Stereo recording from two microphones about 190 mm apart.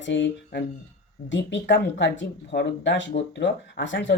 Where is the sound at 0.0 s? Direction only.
75° left (ahead or behind).